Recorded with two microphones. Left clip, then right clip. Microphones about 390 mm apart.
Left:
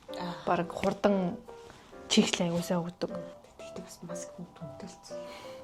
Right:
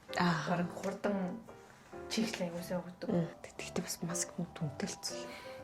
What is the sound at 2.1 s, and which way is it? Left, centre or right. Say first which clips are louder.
A woman's voice: left 10 dB; left.